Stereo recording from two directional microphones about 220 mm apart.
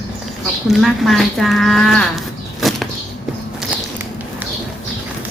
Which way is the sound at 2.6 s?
Centre (ahead or behind).